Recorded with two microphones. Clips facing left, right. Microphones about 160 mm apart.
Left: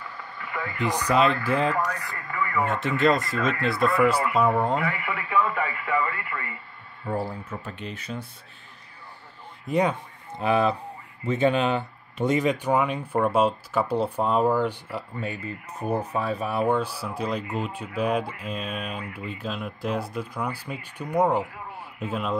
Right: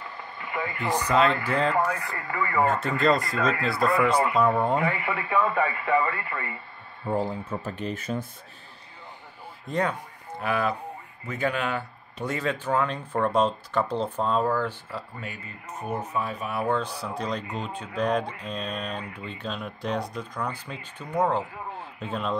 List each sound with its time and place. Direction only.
0.1 s radio: 20° right (ahead or behind)
1.0 s speech: 15° left (ahead or behind)
1.7 s speech: 25° right (ahead or behind)
3.0 s speech: centre (ahead or behind)
4.7 s speech: 25° right (ahead or behind)
7.4 s speech: 40° right (ahead or behind)
9.7 s speech: 15° left (ahead or behind)
10.4 s speech: 25° left (ahead or behind)
15.2 s speech: 30° left (ahead or behind)
16.6 s speech: 10° left (ahead or behind)